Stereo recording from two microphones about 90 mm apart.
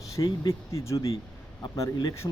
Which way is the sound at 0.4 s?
35° left (ahead or behind).